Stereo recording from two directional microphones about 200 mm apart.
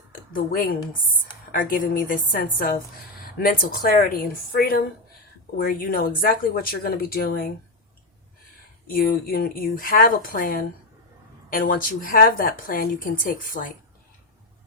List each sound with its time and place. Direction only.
0.1 s a woman's voice: 45° left (ahead or behind)
8.9 s a woman's voice: 45° left (ahead or behind)